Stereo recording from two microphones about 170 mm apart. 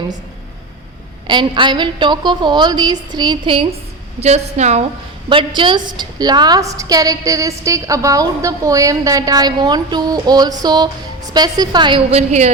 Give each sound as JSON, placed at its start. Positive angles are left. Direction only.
{"t": 1.3, "sound": "a woman's voice", "side_deg": -30}
{"t": 5.3, "sound": "a woman's voice", "side_deg": -30}